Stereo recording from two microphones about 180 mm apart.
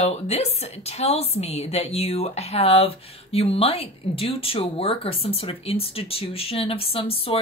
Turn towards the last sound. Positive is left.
turn(degrees=30)  # may be behind; listen again after turning